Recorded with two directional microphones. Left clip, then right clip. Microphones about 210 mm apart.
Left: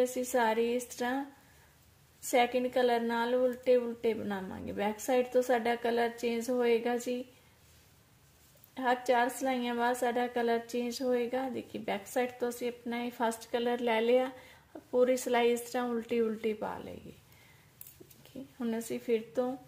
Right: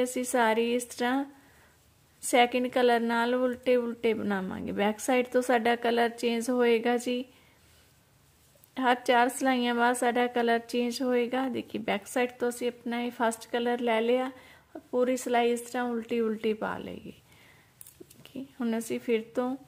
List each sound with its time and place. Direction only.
0.0 s a woman's voice: 25° right (ahead or behind)
2.2 s a woman's voice: 25° right (ahead or behind)
8.7 s a woman's voice: 30° right (ahead or behind)
18.6 s a woman's voice: 25° right (ahead or behind)